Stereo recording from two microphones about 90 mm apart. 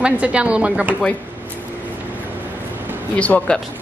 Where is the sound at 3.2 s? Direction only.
15° left (ahead or behind).